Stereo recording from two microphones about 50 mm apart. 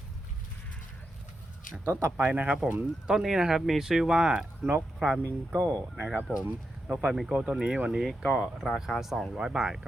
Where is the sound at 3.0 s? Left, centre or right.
Centre.